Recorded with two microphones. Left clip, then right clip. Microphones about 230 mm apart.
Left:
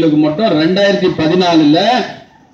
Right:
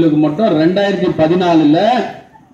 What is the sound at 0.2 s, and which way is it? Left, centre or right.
A man's voice, left.